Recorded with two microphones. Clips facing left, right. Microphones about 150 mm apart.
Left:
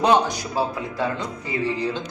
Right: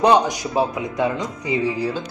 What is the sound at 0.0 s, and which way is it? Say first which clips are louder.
A man's voice: right 3 dB; 15° right (ahead or behind).